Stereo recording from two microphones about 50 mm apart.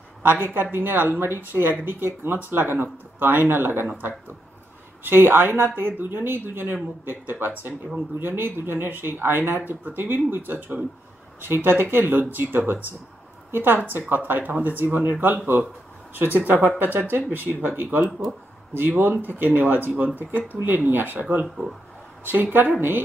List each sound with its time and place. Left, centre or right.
0.2 s a woman's voice: right
5.0 s a woman's voice: right